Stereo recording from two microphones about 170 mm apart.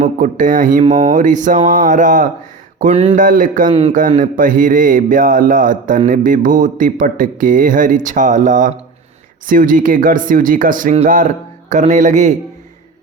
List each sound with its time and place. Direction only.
0.0 s speech: 50° right (ahead or behind)
3.2 s speech: 50° right (ahead or behind)
3.7 s speech: 35° right (ahead or behind)
3.9 s speech: 50° right (ahead or behind)